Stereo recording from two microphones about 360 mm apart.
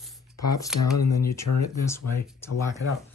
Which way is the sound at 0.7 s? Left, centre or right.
Left.